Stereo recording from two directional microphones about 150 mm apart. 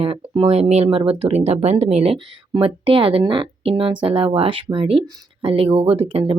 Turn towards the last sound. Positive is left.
turn(degrees=-40)  # may be behind; listen again after turning